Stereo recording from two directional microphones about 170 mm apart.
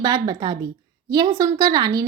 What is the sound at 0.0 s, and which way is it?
A woman's voice, 25° right (ahead or behind).